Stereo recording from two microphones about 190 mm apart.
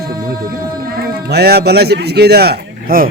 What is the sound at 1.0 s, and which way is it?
A man's voice, 55° right (ahead or behind).